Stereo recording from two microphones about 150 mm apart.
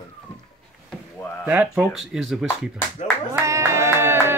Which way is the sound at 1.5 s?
10° right (ahead or behind).